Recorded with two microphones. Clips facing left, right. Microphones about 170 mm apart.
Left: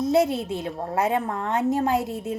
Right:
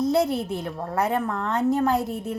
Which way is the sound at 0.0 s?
20° left (ahead or behind).